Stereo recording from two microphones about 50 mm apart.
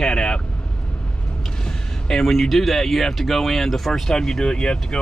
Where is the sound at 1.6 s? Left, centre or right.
Centre.